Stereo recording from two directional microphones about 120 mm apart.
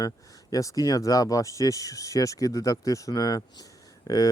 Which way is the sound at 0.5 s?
30° left (ahead or behind).